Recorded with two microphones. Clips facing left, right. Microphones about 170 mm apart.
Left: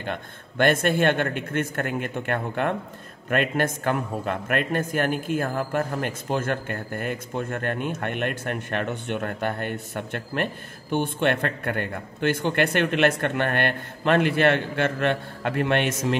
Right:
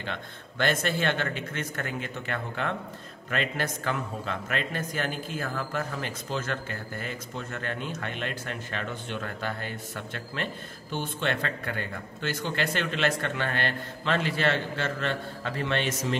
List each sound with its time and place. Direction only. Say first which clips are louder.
0.0 s a man's voice: left 5 dB; 55° left (ahead or behind)